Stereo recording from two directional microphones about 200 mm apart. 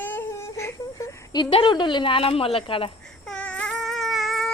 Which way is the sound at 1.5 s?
25° left (ahead or behind).